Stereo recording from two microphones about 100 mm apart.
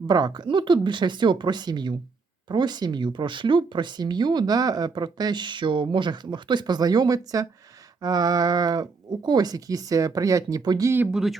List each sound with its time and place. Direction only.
0.1 s speech: 45° right (ahead or behind)
10.8 s speech: 20° right (ahead or behind)
11.1 s speech: centre (ahead or behind)